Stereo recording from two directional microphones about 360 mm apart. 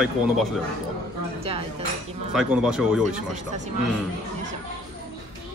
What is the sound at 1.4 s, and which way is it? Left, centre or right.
Cutlery, centre.